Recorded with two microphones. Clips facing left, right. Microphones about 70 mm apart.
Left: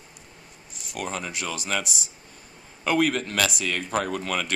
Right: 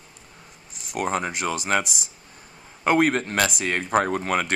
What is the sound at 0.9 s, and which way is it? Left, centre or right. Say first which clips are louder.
Speech: right 6 dB; right.